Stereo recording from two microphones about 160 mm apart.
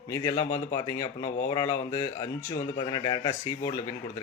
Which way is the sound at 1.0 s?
40° left (ahead or behind).